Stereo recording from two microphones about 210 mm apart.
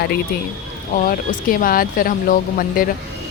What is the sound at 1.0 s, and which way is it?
Speech, 40° left (ahead or behind).